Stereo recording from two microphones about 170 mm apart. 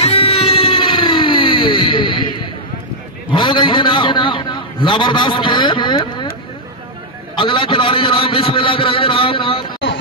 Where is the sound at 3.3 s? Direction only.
25° left (ahead or behind).